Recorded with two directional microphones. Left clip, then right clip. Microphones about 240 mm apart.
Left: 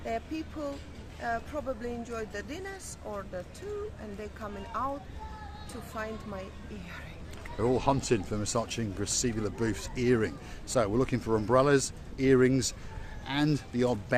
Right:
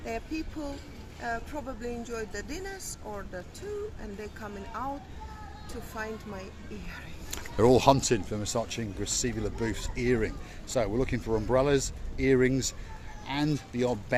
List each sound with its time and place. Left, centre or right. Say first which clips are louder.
0.0 s speech: left 1 dB; centre
5.9 s speech: even; centre
7.3 s speech: right 7 dB; right
8.1 s speech: even; centre